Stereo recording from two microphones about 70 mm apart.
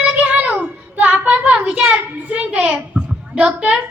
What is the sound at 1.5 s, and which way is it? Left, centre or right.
A child's voice, centre.